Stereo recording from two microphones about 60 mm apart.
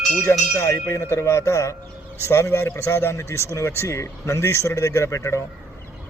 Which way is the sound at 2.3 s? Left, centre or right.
Left.